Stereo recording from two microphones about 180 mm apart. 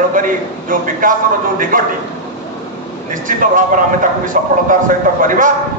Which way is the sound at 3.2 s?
45° right (ahead or behind).